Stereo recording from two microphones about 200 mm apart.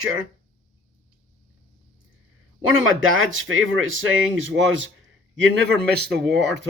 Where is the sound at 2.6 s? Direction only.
85° right.